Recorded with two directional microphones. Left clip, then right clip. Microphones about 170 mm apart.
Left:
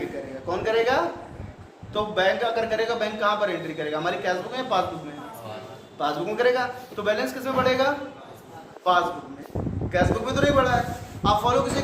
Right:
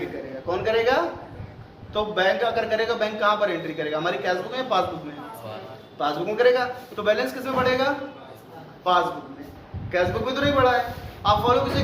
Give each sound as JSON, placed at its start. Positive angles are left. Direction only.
{"t": 0.4, "sound": "a man's voice", "side_deg": 10}
{"t": 6.0, "sound": "a man's voice", "side_deg": 10}